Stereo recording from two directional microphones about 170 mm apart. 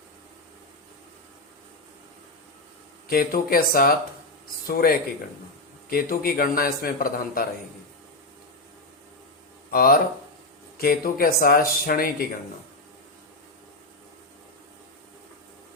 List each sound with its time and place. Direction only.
3.1 s speech: 60° left (ahead or behind)
9.7 s speech: 60° left (ahead or behind)